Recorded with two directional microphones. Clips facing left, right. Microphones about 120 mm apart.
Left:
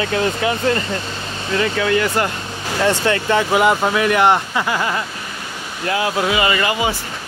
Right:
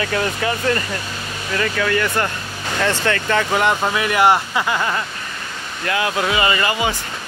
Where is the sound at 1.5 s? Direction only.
30° left (ahead or behind).